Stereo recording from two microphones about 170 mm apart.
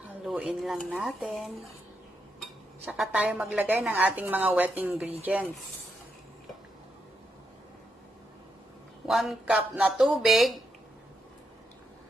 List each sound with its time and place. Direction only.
0.0 s speech: 5° right (ahead or behind)
2.8 s a woman's voice: 10° right (ahead or behind)
9.0 s speech: centre (ahead or behind)